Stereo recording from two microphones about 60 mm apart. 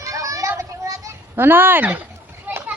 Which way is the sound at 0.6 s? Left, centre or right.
Right.